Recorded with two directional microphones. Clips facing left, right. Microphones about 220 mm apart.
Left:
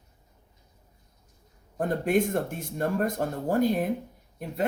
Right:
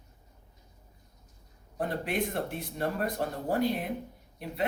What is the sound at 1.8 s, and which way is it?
A man's voice, 45° left (ahead or behind).